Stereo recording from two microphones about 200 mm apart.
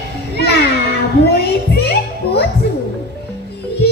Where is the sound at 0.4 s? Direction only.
55° left (ahead or behind).